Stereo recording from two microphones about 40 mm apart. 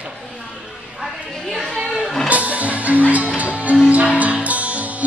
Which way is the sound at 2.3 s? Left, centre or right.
Right.